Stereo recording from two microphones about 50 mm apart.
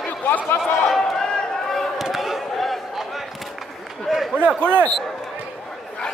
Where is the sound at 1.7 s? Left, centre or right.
Centre.